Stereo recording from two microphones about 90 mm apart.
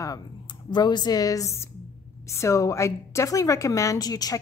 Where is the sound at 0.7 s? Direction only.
55° left (ahead or behind).